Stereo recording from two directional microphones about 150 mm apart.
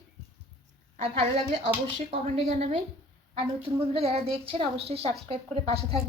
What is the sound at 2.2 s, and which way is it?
A woman's voice, 45° right (ahead or behind).